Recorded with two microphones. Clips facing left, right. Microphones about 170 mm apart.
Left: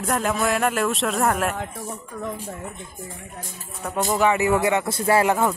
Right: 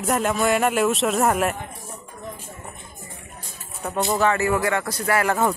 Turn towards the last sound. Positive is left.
turn(degrees=25)  # may be behind; listen again after turning